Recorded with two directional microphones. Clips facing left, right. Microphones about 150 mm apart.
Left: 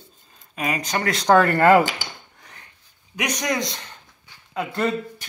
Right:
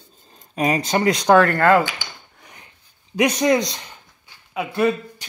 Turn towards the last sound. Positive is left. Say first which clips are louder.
# right 4 dB
turn(degrees=-10)  # may be behind; listen again after turning